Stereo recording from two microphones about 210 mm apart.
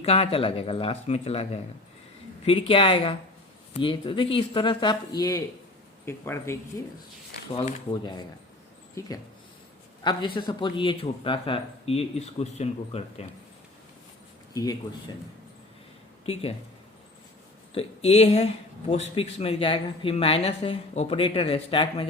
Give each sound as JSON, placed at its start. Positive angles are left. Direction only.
{"t": 0.0, "sound": "speech", "side_deg": 30}
{"t": 7.5, "sound": "speech", "side_deg": 25}
{"t": 14.5, "sound": "speech", "side_deg": 15}
{"t": 17.7, "sound": "speech", "side_deg": 30}